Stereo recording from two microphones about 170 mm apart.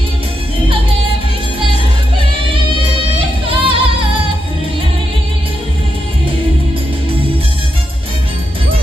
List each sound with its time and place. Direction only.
3.4 s music: 30° right (ahead or behind)